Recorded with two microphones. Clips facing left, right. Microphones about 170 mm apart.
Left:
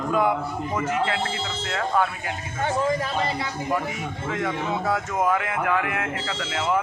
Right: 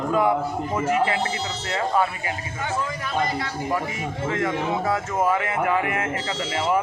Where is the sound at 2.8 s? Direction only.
30° left (ahead or behind).